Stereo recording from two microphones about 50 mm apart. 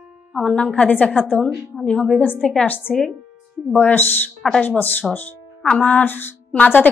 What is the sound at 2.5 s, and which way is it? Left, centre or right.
Speech, left.